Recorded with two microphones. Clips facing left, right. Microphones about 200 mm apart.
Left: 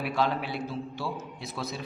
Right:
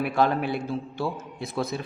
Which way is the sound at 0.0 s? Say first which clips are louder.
Right 5 dB; 50° right (ahead or behind).